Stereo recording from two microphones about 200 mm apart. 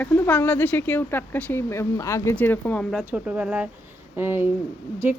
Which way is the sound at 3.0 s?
10° right (ahead or behind).